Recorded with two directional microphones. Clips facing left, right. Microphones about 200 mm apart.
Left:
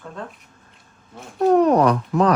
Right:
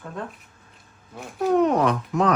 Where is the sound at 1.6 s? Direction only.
35° left (ahead or behind).